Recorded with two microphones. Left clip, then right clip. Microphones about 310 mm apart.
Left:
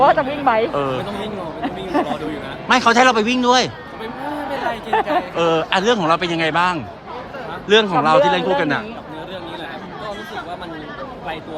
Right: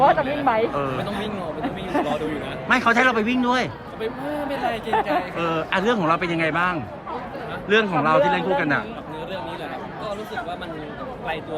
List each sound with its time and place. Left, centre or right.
0.0 s speech: left
2.6 s a man's voice: centre
4.9 s speech: left
5.4 s a man's voice: centre